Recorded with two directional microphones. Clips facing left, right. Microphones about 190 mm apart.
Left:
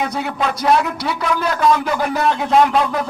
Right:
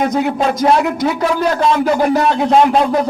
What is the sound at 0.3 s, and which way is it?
Speech, 35° right (ahead or behind).